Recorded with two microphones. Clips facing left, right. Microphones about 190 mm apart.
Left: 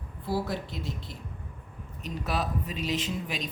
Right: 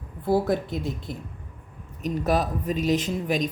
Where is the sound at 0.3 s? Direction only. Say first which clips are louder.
Right 8 dB; 50° right (ahead or behind).